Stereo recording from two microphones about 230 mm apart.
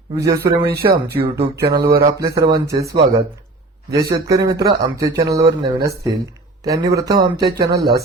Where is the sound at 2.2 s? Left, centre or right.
Centre.